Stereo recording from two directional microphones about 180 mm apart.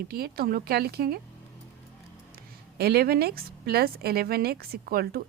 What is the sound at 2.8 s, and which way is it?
A woman's voice, 60° right (ahead or behind).